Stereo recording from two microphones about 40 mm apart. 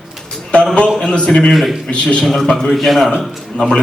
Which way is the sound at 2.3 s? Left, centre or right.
Centre.